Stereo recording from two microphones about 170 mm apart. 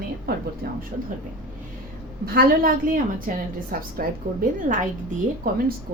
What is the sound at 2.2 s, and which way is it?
A woman's voice, 60° right (ahead or behind).